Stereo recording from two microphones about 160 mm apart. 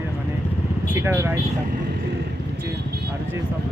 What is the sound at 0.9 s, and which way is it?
Speech, 15° right (ahead or behind).